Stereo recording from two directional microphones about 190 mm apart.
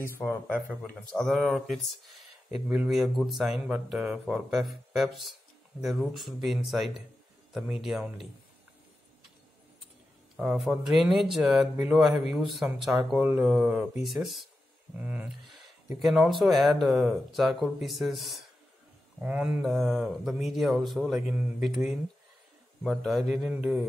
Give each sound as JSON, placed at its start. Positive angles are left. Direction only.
{"t": 0.0, "sound": "speech", "side_deg": 10}
{"t": 10.3, "sound": "speech", "side_deg": -5}